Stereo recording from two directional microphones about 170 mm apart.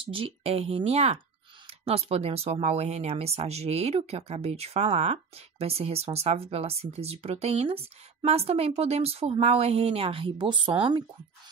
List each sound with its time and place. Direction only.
0.0 s speech: 30° right (ahead or behind)